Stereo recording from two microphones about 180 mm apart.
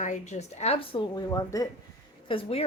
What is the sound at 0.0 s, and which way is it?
Speech, 40° left (ahead or behind).